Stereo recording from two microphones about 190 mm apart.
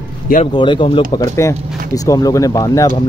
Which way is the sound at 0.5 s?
25° left (ahead or behind).